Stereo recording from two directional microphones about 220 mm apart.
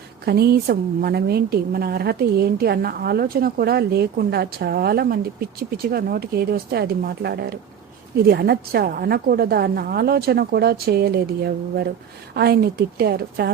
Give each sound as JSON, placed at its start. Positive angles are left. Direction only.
{"t": 0.3, "sound": "a woman's voice", "side_deg": -45}